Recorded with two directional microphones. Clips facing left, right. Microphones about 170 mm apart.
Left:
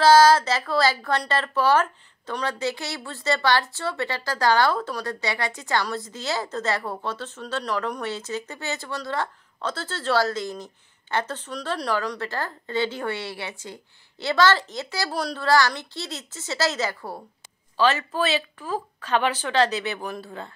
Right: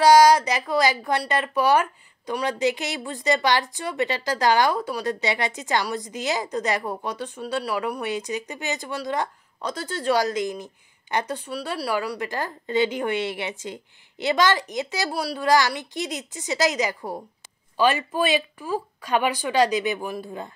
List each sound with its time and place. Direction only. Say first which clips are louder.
0.0 s a woman's voice: right 1 dB; 15° right (ahead or behind)